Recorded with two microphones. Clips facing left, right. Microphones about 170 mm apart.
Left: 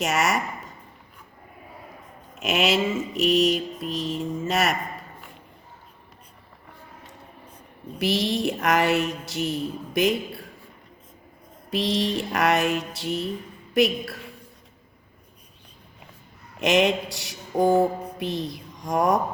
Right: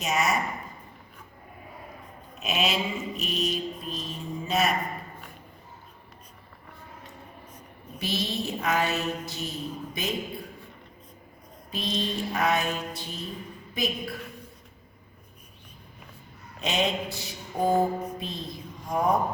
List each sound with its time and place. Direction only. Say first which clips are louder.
0.0 s speech: left 3 dB; 80° left
2.4 s mantra: left 5 dB; 85° left
7.9 s a sound: left 7 dB; 80° left
11.7 s a sound: left 6 dB; 75° left (ahead or behind)
16.6 s mantra: left 7 dB; 85° left
18.2 s a woman's voice: left 7 dB; 75° left (ahead or behind)